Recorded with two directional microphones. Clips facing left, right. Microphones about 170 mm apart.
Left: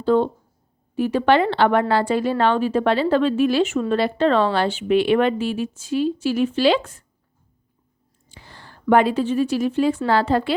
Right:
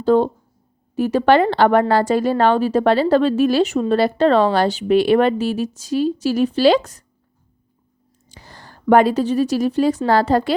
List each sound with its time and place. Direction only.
0.0 s a woman's voice: 40° right (ahead or behind)
8.3 s a woman's voice: 40° right (ahead or behind)